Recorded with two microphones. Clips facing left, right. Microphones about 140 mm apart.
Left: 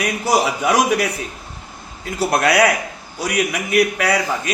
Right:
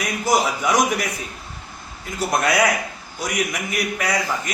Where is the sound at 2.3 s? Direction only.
70° left (ahead or behind).